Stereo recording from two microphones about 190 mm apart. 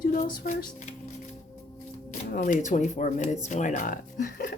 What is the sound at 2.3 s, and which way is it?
A woman's voice, 45° left (ahead or behind).